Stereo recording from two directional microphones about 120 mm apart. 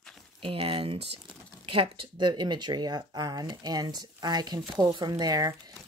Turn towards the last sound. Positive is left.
turn(degrees=-30)  # may be behind; listen again after turning